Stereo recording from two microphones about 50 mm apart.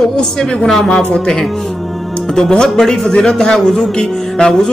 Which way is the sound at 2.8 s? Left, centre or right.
Centre.